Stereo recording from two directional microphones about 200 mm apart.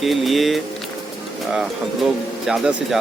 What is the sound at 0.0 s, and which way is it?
Speech, centre (ahead or behind).